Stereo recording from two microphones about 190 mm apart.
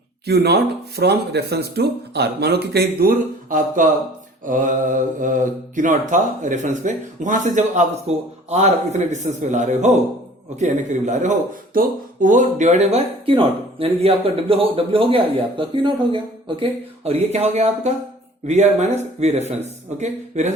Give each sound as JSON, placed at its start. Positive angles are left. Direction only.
{"t": 0.3, "sound": "speech", "side_deg": -60}